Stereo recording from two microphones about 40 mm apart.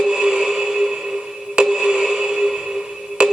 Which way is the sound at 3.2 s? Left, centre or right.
Right.